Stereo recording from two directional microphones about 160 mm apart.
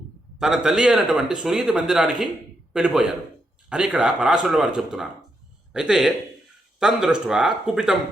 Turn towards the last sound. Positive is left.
turn(degrees=-5)  # may be behind; listen again after turning